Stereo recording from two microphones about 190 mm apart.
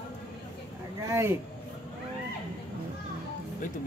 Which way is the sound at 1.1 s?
15° right (ahead or behind).